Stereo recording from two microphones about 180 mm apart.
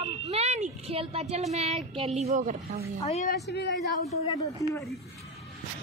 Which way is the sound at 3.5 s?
65° left (ahead or behind).